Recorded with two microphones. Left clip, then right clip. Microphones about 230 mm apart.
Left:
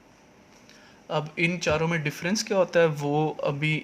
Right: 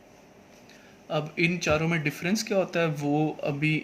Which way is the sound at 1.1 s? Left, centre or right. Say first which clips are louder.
Even; left.